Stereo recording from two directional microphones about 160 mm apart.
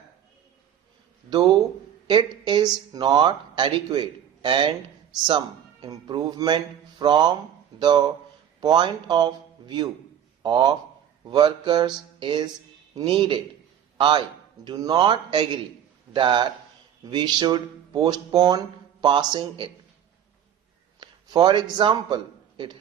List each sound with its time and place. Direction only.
1.3 s speech: 30° right (ahead or behind)
5.8 s speech: 25° right (ahead or behind)
21.0 s a man's voice: 25° right (ahead or behind)